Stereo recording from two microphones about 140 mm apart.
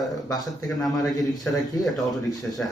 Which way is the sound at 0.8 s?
25° left (ahead or behind).